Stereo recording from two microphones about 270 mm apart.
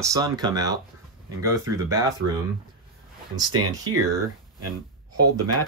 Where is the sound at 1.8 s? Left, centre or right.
Centre.